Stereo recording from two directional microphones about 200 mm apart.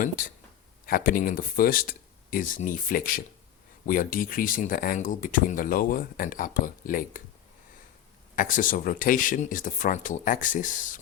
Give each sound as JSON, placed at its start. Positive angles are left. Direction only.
{"t": 0.9, "sound": "speech", "side_deg": 45}
{"t": 8.4, "sound": "speech", "side_deg": 40}